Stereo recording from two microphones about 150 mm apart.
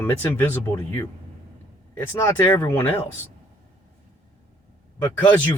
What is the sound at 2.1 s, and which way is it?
Speech, 20° left (ahead or behind).